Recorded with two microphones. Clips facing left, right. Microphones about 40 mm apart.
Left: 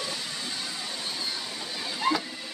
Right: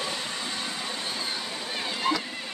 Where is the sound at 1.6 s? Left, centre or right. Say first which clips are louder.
Right 3 dB; right.